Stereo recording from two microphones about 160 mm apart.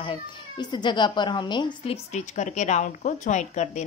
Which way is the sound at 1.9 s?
45° left (ahead or behind).